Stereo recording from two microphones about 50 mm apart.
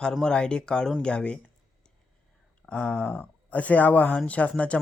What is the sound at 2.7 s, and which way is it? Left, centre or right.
Speech, centre.